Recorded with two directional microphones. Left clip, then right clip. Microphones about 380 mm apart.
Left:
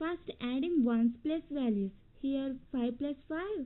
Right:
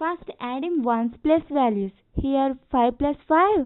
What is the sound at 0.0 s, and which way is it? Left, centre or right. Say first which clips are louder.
A woman's voice: right 10 dB; centre.